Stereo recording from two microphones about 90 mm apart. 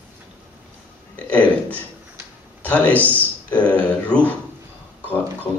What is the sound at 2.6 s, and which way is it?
A man's voice, 15° left (ahead or behind).